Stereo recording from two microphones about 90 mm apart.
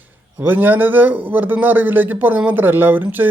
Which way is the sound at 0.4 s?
20° right (ahead or behind).